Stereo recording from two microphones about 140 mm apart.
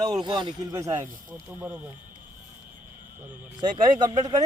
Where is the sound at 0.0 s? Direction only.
30° right (ahead or behind).